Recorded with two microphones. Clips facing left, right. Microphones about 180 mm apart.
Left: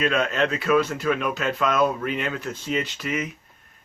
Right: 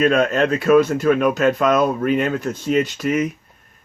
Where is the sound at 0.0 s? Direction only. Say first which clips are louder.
Right 6 dB; 45° right (ahead or behind).